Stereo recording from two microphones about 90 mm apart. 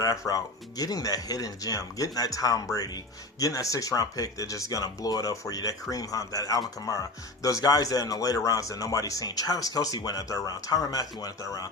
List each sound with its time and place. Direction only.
0.0 s speech: 40° left (ahead or behind)